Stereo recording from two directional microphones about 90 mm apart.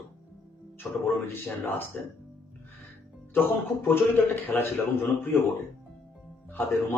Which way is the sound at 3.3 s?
25° left (ahead or behind).